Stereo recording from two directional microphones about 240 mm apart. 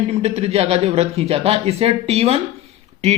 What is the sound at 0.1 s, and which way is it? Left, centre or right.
Speech, right.